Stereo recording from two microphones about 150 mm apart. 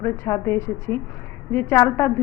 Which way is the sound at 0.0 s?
20° left (ahead or behind).